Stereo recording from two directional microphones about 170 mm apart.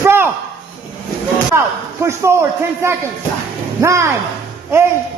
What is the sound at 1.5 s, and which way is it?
A man's voice, 15° right (ahead or behind).